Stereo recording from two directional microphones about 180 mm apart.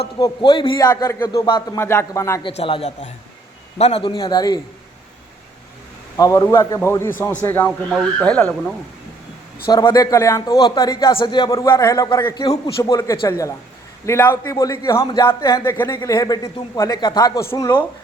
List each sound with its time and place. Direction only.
0.2 s a man's voice: 25° left (ahead or behind)
2.6 s a man's voice: 30° left (ahead or behind)
6.1 s a man's voice: 20° left (ahead or behind)
9.6 s a man's voice: 20° left (ahead or behind)